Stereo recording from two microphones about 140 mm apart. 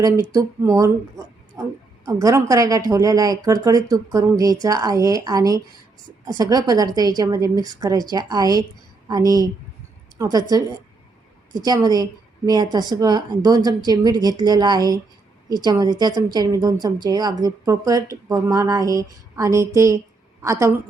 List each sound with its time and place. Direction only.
0.0 s a woman's voice: 20° right (ahead or behind)
2.0 s a woman's voice: 25° right (ahead or behind)
11.5 s a woman's voice: 25° right (ahead or behind)